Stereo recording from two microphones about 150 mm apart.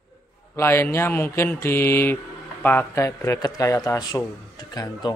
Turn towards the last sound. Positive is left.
turn(degrees=25)  # may be behind; listen again after turning